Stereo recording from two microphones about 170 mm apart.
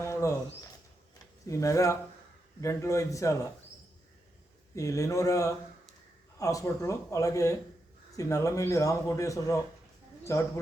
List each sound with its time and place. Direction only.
0.0 s a sound: 15° left (ahead or behind)
1.5 s a man's voice: 20° left (ahead or behind)
4.7 s a man's voice: 20° left (ahead or behind)